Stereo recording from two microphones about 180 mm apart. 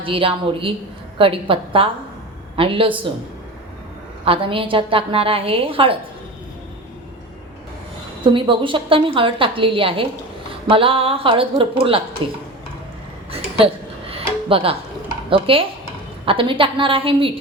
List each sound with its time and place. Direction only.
0.0 s a woman's voice: 30° right (ahead or behind)
4.3 s a woman's voice: 30° right (ahead or behind)
8.2 s a woman's voice: 30° right (ahead or behind)
14.5 s a woman's voice: 30° right (ahead or behind)